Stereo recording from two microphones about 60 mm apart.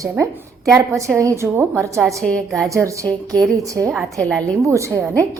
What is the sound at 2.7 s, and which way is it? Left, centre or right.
Speech, right.